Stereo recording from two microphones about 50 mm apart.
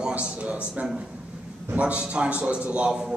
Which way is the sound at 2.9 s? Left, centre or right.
Centre.